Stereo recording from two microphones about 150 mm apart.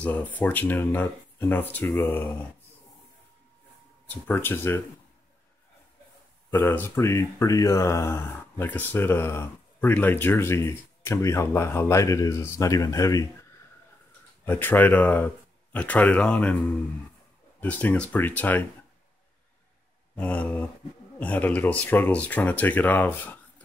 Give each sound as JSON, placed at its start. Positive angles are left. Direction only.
{"t": 0.0, "sound": "speech", "side_deg": 10}
{"t": 4.1, "sound": "speech", "side_deg": 15}
{"t": 6.5, "sound": "speech", "side_deg": 15}
{"t": 14.4, "sound": "speech", "side_deg": 15}
{"t": 17.6, "sound": "speech", "side_deg": 10}
{"t": 20.2, "sound": "speech", "side_deg": 10}